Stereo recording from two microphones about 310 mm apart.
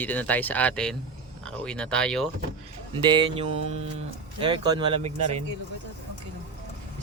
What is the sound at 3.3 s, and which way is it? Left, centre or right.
Mantra, right.